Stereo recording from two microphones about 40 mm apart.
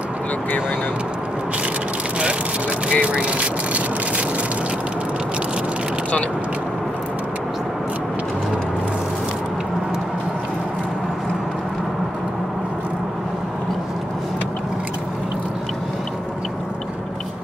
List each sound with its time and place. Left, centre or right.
2.9 s speech: right